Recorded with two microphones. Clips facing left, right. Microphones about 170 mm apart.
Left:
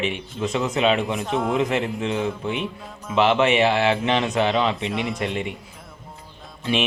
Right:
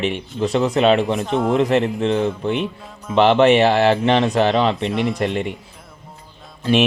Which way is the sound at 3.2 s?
35° right (ahead or behind).